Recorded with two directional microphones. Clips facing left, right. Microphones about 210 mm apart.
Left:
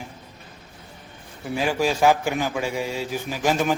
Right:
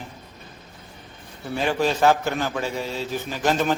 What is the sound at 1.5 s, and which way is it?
A man's voice, 5° left (ahead or behind).